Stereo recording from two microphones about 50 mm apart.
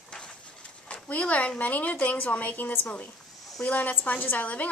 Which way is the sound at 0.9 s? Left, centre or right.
Left.